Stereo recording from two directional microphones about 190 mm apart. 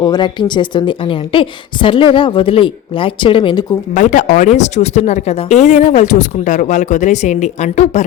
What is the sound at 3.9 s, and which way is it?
Speech, 40° left (ahead or behind).